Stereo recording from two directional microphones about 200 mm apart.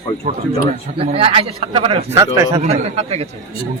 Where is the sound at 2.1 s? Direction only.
15° right (ahead or behind).